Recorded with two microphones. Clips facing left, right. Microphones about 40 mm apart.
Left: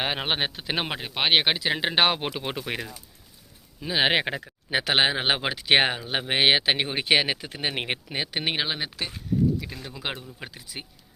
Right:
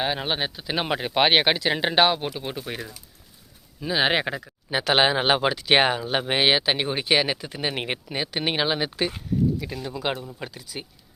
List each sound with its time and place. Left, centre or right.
0.0 s speech: left
0.9 s speech: centre
1.3 s speech: centre
2.3 s speech: left
3.8 s speech: centre
4.9 s speech: centre
8.6 s speech: centre
9.8 s speech: centre